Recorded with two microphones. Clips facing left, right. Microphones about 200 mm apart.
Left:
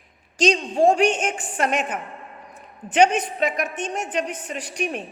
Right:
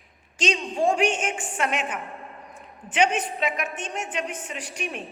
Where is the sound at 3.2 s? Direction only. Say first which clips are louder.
Left 4 dB; 40° left (ahead or behind).